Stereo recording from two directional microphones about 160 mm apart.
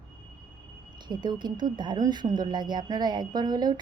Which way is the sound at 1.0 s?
30° right (ahead or behind).